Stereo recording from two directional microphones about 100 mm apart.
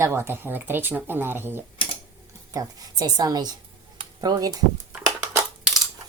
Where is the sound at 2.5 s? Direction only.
40° right (ahead or behind).